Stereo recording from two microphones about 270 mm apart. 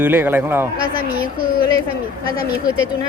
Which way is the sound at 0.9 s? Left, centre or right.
Right.